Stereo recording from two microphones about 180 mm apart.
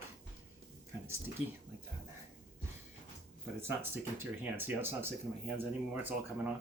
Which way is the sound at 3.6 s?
10° right (ahead or behind).